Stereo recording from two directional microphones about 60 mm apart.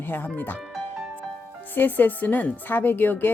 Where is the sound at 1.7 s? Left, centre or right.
Left.